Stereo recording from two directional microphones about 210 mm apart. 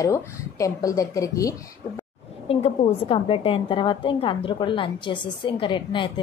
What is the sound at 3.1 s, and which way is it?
A woman's voice, 25° left (ahead or behind).